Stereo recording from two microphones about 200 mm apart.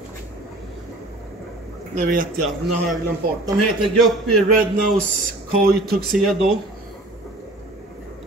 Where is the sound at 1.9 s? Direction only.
40° right (ahead or behind).